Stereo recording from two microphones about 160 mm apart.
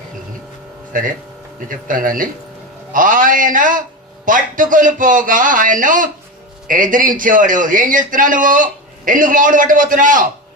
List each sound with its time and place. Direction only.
0.9 s a man's voice: 55° right (ahead or behind)